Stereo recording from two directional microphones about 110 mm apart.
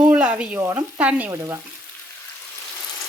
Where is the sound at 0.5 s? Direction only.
30° right (ahead or behind).